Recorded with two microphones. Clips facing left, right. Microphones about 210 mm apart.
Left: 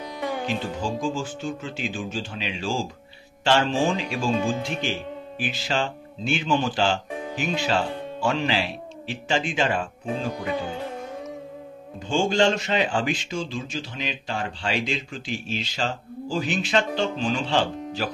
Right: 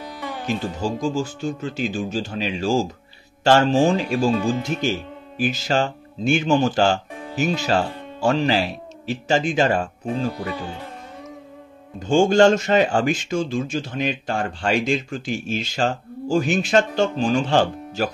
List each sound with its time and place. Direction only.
0.5 s speech: 40° right (ahead or behind)
12.1 s speech: 50° right (ahead or behind)